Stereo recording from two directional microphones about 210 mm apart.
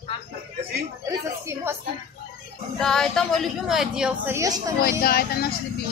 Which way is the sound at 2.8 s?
Centre (ahead or behind).